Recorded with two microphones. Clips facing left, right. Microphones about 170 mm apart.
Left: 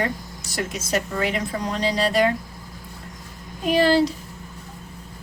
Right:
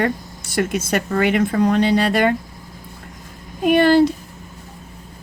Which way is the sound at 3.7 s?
55° right (ahead or behind).